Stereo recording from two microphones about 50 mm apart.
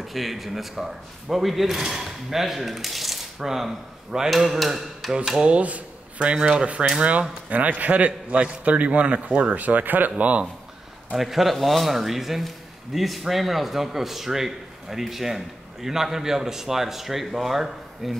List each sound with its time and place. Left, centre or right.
0.0 s speech: centre
4.3 s speech: centre; by 10.5 s right
11.1 s speech: centre